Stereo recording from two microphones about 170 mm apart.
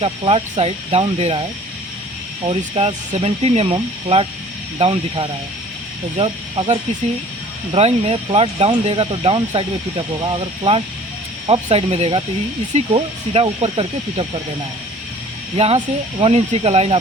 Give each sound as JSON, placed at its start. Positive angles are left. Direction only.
{"t": 0.0, "sound": "speech", "side_deg": -30}
{"t": 15.5, "sound": "speech", "side_deg": -35}